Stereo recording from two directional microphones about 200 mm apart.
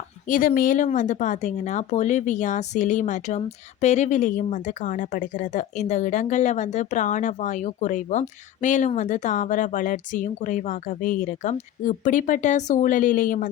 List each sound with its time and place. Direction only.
0.3 s speech: 45° left (ahead or behind)